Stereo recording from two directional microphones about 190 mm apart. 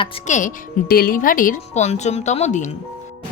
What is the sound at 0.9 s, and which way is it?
A woman's voice, 50° left (ahead or behind).